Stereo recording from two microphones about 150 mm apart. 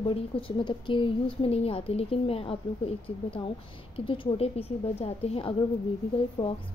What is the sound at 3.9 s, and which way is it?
A woman's voice, 35° left (ahead or behind).